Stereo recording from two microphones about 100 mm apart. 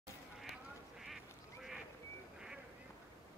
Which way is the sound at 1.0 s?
5° right (ahead or behind).